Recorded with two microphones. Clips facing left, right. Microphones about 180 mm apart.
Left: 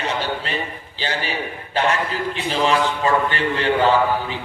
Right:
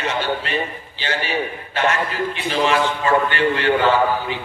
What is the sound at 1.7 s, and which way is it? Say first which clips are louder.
A man's voice: left 1 dB; 35° left (ahead or behind).